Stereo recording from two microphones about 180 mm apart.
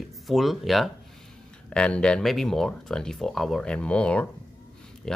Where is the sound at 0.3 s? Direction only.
Centre (ahead or behind).